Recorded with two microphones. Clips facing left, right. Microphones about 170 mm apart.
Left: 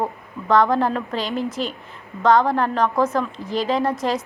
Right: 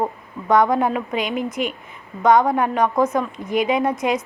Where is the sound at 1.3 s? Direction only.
30° left (ahead or behind).